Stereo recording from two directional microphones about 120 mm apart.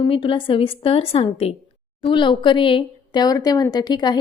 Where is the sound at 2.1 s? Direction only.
40° left (ahead or behind).